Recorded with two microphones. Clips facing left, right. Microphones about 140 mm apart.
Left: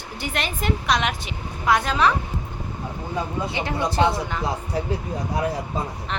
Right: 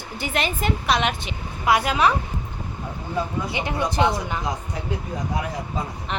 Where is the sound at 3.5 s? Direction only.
20° right (ahead or behind).